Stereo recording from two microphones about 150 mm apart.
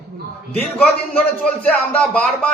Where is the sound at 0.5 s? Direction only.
10° left (ahead or behind).